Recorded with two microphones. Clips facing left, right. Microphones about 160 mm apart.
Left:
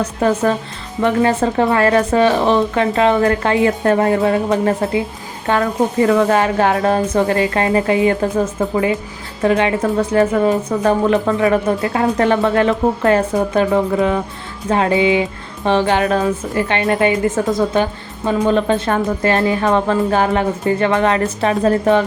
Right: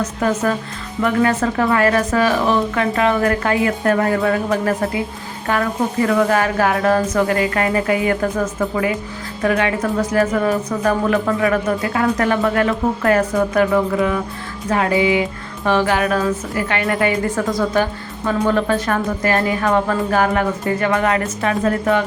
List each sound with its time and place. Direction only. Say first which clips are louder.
0.0 s a woman's voice: left 3 dB; 30° left (ahead or behind)